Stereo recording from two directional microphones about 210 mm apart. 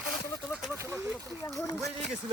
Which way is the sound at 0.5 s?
5° right (ahead or behind).